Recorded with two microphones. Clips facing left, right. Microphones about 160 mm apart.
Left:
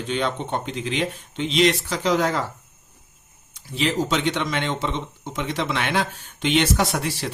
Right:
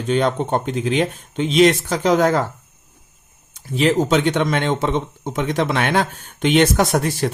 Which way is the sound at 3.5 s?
50° right (ahead or behind).